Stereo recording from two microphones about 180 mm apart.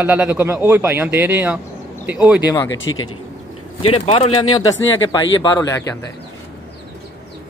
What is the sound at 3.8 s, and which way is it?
Speech, 35° left (ahead or behind).